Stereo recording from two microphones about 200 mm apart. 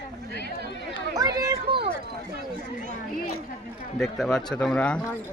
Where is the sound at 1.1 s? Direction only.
20° right (ahead or behind).